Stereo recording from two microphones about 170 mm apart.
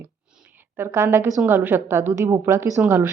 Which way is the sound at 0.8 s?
15° right (ahead or behind).